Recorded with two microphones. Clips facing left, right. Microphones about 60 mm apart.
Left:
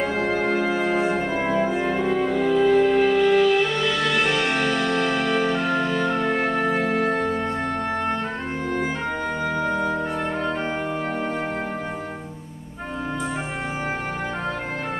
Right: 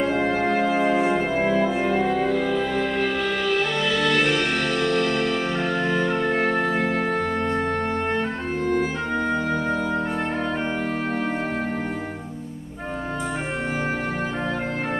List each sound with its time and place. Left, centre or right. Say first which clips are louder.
0.9 s music: right 1 dB; centre